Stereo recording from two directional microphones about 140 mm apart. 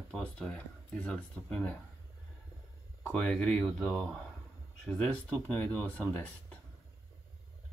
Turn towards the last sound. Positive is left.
turn(degrees=10)  # may be behind; listen again after turning